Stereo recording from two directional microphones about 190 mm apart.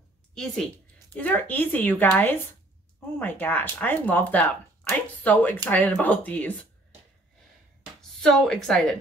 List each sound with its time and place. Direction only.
0.3 s a woman's voice: 5° left (ahead or behind)
8.2 s speech: 5° left (ahead or behind)